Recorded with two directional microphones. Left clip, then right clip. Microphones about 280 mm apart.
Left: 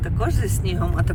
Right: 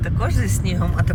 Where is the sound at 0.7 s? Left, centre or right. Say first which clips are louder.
Right 1 dB; left.